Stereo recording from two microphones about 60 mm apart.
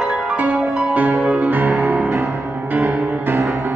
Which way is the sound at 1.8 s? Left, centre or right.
Right.